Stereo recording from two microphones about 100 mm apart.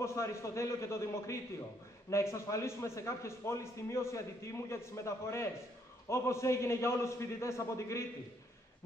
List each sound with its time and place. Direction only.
0.0 s a man's voice: 30° left (ahead or behind)